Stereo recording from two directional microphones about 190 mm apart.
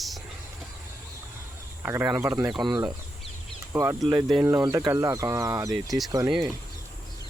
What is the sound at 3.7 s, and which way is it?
Speech, 20° right (ahead or behind).